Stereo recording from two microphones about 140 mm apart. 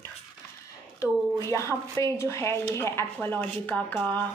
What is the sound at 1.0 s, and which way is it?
Speech, 20° left (ahead or behind).